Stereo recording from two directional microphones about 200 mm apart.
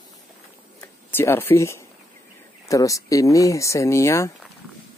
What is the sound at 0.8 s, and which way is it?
Speech, 10° left (ahead or behind).